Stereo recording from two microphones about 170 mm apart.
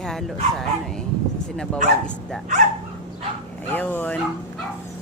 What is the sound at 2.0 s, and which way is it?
Speech, 5° left (ahead or behind).